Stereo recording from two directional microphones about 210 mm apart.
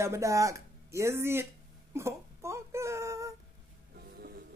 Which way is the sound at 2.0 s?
15° right (ahead or behind).